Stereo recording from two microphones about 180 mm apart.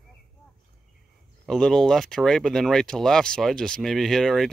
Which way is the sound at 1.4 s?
Centre (ahead or behind).